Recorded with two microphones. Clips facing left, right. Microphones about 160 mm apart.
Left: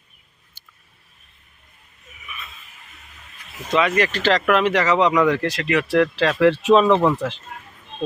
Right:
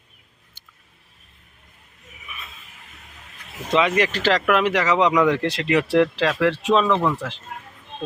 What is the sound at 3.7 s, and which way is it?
Speech, 20° right (ahead or behind).